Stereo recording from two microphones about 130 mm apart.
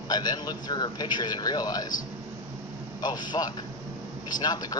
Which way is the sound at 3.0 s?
30° left (ahead or behind).